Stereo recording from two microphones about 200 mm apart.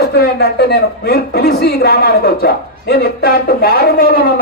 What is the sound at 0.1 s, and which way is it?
A woman's voice, 55° left (ahead or behind).